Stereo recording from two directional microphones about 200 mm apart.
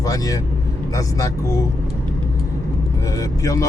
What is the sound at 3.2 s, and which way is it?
Speech, 15° left (ahead or behind).